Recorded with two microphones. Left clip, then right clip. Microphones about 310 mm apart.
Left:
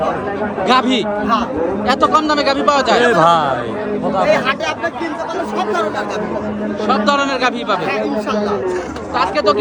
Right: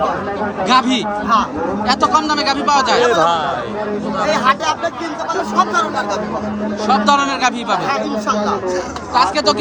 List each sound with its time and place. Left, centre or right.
0.7 s speech: centre
3.1 s speech: left
4.3 s speech: centre
6.8 s speech: centre
9.1 s speech: centre